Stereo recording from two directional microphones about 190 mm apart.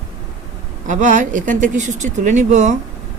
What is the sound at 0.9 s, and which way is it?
Speech, 40° right (ahead or behind).